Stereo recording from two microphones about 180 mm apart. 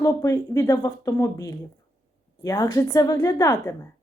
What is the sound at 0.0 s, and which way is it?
Speech, 20° left (ahead or behind).